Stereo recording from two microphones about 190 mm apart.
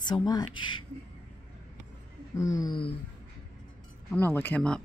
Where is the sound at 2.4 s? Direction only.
20° left (ahead or behind).